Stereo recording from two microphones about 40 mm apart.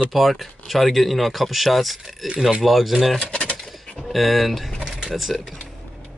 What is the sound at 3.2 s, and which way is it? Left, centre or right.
Speech, left.